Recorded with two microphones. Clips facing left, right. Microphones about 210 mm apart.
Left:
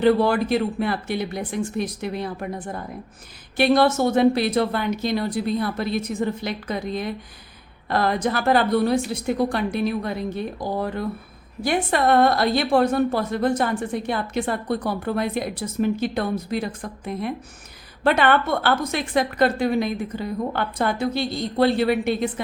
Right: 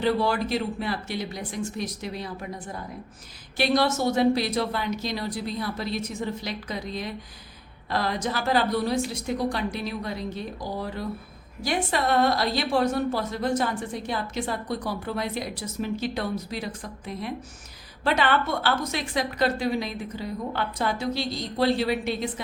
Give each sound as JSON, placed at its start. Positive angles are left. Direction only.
{"t": 0.0, "sound": "a woman's voice", "side_deg": 55}